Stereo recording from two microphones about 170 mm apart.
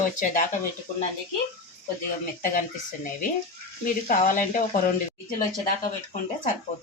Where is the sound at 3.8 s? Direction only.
55° left (ahead or behind).